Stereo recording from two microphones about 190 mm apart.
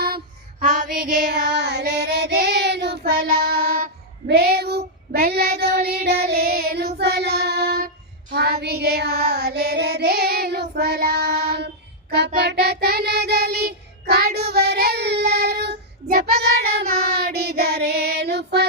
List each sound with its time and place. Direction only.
1.3 s child singing: 60° right (ahead or behind)